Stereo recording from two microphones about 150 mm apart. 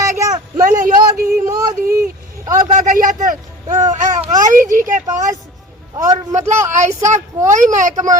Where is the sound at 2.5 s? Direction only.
60° right (ahead or behind).